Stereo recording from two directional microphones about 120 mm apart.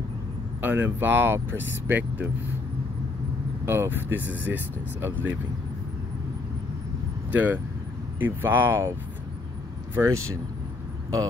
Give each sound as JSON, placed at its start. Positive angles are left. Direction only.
{"t": 0.6, "sound": "speech", "side_deg": -15}
{"t": 3.6, "sound": "speech", "side_deg": -20}
{"t": 7.2, "sound": "speech", "side_deg": -15}
{"t": 9.9, "sound": "speech", "side_deg": -25}